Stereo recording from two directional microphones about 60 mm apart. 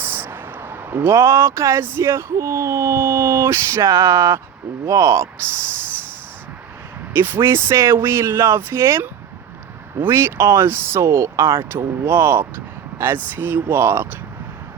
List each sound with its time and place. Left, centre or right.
0.0 s a sound: right
1.8 s speech: right
7.1 s speech: right